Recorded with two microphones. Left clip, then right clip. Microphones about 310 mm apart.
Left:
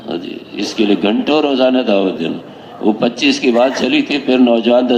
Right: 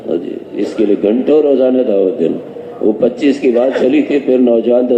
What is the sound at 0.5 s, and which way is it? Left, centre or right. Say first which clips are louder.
A man's voice: right 2 dB; left.